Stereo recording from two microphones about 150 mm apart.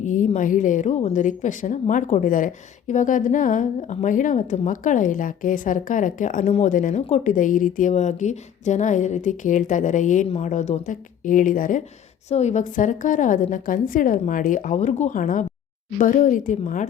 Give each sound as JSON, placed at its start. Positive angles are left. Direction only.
{"t": 0.0, "sound": "a woman's voice", "side_deg": 55}
{"t": 12.3, "sound": "a woman's voice", "side_deg": 50}